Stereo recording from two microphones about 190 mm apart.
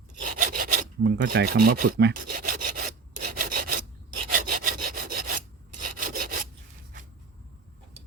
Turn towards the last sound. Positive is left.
turn(degrees=-45)  # may be behind; listen again after turning